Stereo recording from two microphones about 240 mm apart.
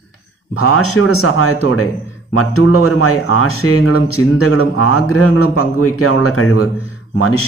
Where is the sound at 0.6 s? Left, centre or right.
Left.